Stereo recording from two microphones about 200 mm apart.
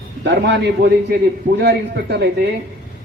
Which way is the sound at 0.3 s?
60° right (ahead or behind).